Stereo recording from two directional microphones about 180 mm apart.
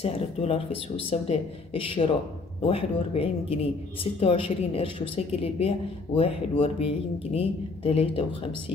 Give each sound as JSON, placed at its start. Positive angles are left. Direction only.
{"t": 0.0, "sound": "a woman's voice", "side_deg": 35}